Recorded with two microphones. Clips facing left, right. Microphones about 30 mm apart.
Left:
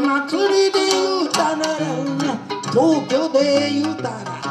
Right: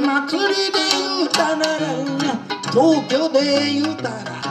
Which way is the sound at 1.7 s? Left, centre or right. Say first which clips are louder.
Right 1 dB; right.